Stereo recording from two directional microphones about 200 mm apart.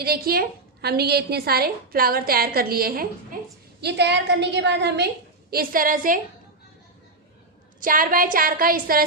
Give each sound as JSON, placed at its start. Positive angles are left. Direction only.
{"t": 0.0, "sound": "a woman's voice", "side_deg": -50}
{"t": 3.3, "sound": "a sound", "side_deg": -45}
{"t": 3.8, "sound": "a woman's voice", "side_deg": -55}
{"t": 5.5, "sound": "a woman's voice", "side_deg": -45}
{"t": 7.8, "sound": "a woman's voice", "side_deg": -45}